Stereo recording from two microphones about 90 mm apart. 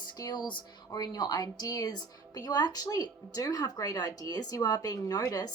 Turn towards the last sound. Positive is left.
turn(degrees=45)  # may be behind; listen again after turning